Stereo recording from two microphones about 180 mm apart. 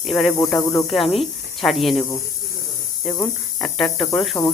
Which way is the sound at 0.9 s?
Centre (ahead or behind).